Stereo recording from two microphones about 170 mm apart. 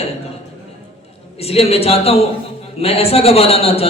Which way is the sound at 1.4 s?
35° left (ahead or behind).